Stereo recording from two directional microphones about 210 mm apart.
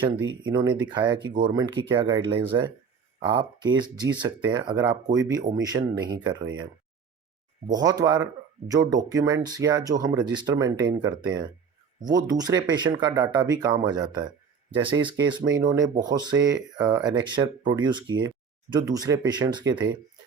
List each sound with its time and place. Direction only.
0.3 s speech: 20° right (ahead or behind)
7.7 s speech: 20° right (ahead or behind)